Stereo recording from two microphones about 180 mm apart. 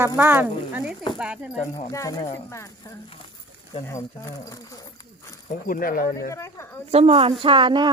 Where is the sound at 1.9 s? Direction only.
20° left (ahead or behind).